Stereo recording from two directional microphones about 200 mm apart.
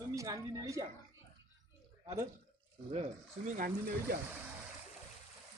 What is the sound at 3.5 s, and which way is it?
Speech, 45° right (ahead or behind).